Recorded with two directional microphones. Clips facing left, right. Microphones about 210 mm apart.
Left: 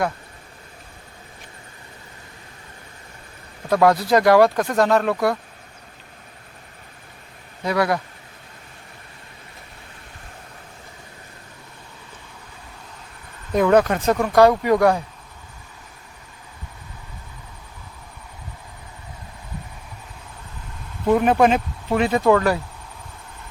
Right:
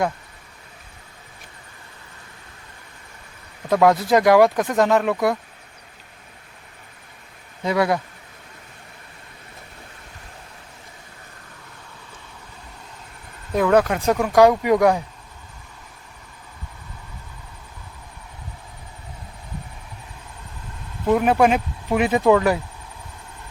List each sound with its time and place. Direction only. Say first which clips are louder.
3.7 s speech: even; 15° right (ahead or behind)
7.6 s a man's voice: right 1 dB; 20° right (ahead or behind)
13.5 s speech: left 1 dB; centre (ahead or behind)
21.2 s speech: even; 5° right (ahead or behind)